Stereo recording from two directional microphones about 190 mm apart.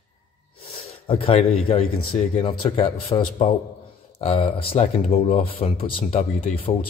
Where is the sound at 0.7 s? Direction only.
30° left (ahead or behind).